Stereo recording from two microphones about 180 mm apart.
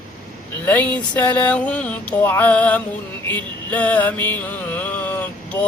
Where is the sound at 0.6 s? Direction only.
10° left (ahead or behind).